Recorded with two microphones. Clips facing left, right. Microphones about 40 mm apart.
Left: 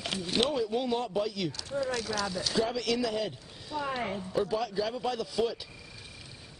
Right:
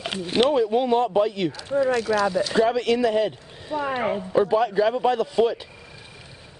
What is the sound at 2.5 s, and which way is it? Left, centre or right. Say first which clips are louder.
Speech: right 8 dB; right.